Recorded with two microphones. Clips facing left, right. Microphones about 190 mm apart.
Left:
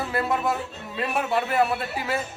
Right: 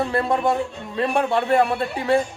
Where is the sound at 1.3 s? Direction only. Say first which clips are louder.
Right 3 dB; 30° right (ahead or behind).